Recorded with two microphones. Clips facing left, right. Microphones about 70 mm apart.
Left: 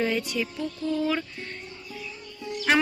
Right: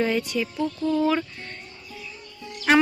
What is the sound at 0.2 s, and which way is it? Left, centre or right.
A woman's voice, centre.